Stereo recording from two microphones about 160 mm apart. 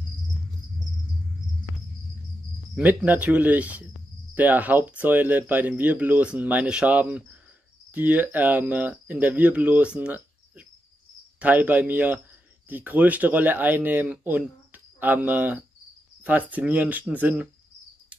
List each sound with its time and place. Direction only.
2.7 s speech: 5° right (ahead or behind)
9.9 s a sound: 10° right (ahead or behind)
11.3 s speech: 10° right (ahead or behind)